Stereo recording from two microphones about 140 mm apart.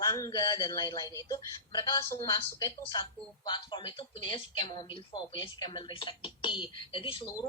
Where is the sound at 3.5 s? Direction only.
35° left (ahead or behind).